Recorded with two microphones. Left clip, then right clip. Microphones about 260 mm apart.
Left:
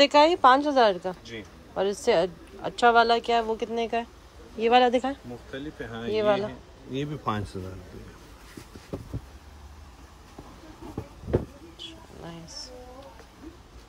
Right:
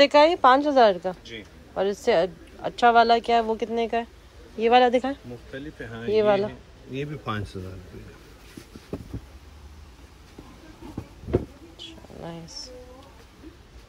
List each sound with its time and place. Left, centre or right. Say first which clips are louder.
0.0 s speech: right 2 dB; centre
5.5 s speech: left 1 dB; left
6.1 s speech: right 4 dB; centre
6.9 s speech: left 1 dB; left
12.6 s speech: left 1 dB; centre